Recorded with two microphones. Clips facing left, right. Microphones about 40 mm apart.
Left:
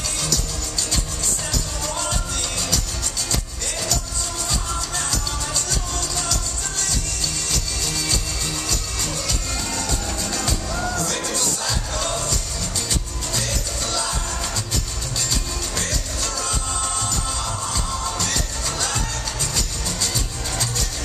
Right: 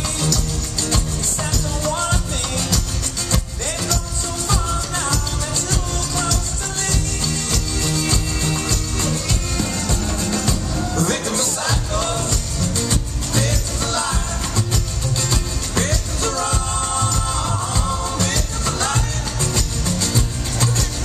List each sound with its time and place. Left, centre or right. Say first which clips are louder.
2.0 s music: right 4 dB; right
4.5 s music: right 6 dB; right
7.8 s music: right 6 dB; right
11.0 s music: right 4 dB; right
16.2 s music: right 7 dB; right